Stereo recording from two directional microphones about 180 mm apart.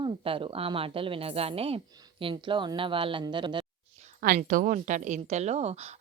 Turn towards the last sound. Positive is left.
turn(degrees=-35)  # may be behind; listen again after turning